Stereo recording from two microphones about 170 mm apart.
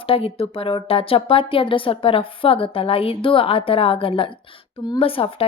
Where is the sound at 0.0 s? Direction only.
35° left (ahead or behind).